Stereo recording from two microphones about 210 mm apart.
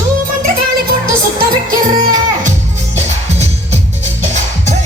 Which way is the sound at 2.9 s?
30° right (ahead or behind).